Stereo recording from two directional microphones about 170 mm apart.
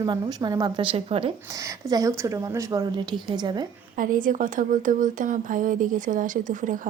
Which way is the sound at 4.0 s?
50° right (ahead or behind).